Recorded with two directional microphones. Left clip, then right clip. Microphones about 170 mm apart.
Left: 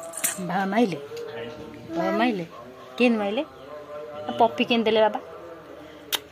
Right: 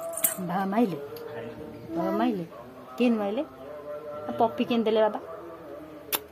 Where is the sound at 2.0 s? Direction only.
10° left (ahead or behind).